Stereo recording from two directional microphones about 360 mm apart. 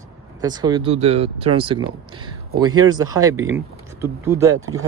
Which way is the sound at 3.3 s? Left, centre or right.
Right.